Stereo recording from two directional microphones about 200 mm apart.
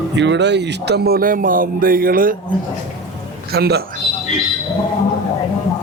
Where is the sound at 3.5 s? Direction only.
55° right (ahead or behind).